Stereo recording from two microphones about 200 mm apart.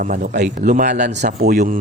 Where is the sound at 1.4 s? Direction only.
50° right (ahead or behind).